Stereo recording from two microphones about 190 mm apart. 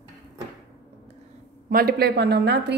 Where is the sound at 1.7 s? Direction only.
50° right (ahead or behind).